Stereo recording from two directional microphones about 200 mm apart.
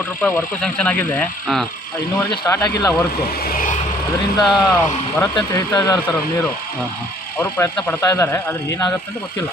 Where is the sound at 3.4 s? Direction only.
45° left (ahead or behind).